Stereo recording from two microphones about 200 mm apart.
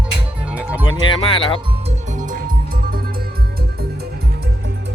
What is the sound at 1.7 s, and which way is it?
Music, 35° right (ahead or behind).